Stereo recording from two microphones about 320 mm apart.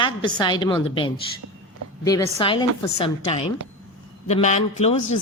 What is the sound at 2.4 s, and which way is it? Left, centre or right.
Speech, centre.